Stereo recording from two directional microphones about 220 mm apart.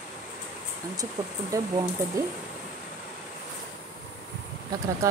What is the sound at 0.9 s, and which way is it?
Speech, 15° right (ahead or behind).